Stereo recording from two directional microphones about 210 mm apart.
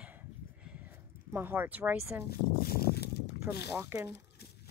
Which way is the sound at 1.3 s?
10° right (ahead or behind).